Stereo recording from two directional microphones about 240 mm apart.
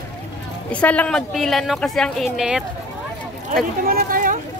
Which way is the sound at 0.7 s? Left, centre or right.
Centre.